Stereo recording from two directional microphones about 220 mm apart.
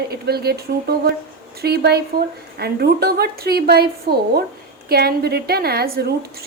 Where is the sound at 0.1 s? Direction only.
45° right (ahead or behind).